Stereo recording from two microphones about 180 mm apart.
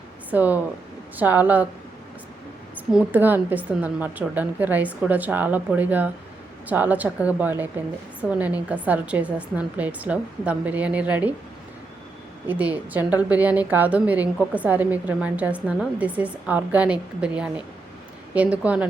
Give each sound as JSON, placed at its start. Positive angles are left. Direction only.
{"t": 0.3, "sound": "a woman's voice", "side_deg": -10}
{"t": 2.7, "sound": "a woman's voice", "side_deg": -10}
{"t": 12.5, "sound": "a woman's voice", "side_deg": -10}